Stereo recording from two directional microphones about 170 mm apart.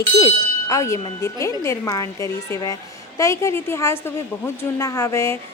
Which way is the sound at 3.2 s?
15° left (ahead or behind).